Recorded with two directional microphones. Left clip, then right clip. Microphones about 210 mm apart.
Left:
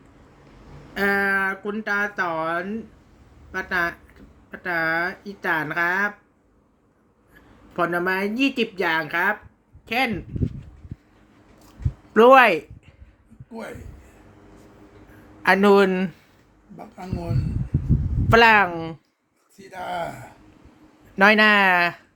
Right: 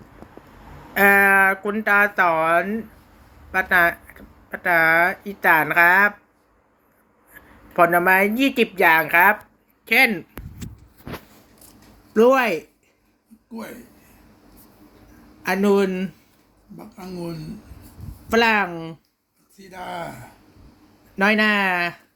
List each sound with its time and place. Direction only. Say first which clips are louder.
0.9 s speech: right 7 dB; 5° left (ahead or behind)
7.8 s speech: right 7 dB; 5° left (ahead or behind)
12.1 s speech: left 4 dB; 20° left (ahead or behind)
13.5 s a man's voice: left 1 dB; centre (ahead or behind)
15.4 s speech: left 4 dB; 25° left (ahead or behind)
16.7 s speech: left 1 dB; centre (ahead or behind)
18.3 s speech: left 4 dB; 20° left (ahead or behind)
19.5 s speech: left 2 dB; centre (ahead or behind)
21.2 s speech: left 3 dB; 20° left (ahead or behind)